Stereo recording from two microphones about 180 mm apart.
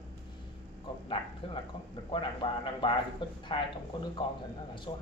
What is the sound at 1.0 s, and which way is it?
A man's voice, 30° left (ahead or behind).